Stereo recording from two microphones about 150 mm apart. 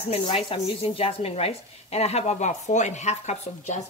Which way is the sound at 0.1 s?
40° left (ahead or behind).